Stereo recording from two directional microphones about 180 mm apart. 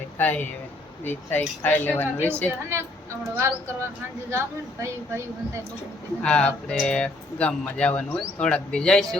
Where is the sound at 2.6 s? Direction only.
15° right (ahead or behind).